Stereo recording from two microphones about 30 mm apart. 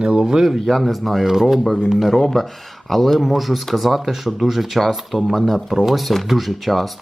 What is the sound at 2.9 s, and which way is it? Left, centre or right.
Speech, centre.